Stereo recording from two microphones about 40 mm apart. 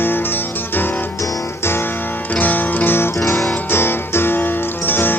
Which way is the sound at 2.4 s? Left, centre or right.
Left.